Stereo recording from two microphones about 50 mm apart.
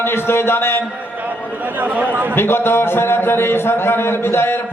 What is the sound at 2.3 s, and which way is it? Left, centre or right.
A man's voice, left.